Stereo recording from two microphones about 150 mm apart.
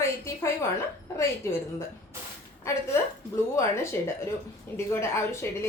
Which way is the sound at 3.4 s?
20° left (ahead or behind).